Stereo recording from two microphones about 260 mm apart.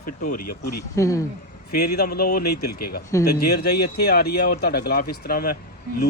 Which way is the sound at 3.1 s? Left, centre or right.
Centre.